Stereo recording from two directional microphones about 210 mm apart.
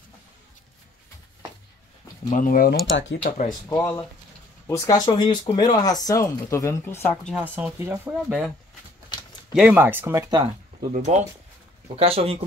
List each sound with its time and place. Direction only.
2.3 s speech: 40° left (ahead or behind)
2.9 s speech: 60° left (ahead or behind)
3.3 s speech: 40° left (ahead or behind)
3.6 s speech: 15° left (ahead or behind)
7.3 s speech: 5° right (ahead or behind)
9.5 s speech: 5° right (ahead or behind)
10.8 s speech: 35° right (ahead or behind)